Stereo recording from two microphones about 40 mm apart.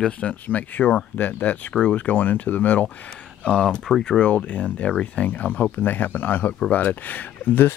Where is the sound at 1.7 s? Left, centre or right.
Left.